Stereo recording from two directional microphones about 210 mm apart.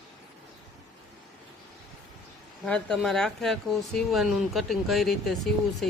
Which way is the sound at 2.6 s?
5° left (ahead or behind).